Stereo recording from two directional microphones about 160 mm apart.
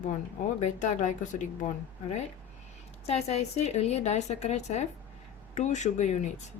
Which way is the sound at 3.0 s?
40° left (ahead or behind).